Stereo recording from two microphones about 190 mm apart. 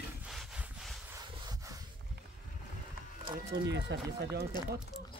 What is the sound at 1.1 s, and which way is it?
Rub, 20° right (ahead or behind).